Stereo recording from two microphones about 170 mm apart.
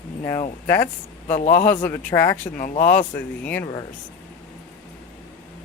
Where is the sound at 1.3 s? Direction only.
45° left (ahead or behind).